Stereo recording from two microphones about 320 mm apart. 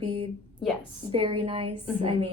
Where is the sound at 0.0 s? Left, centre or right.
Centre.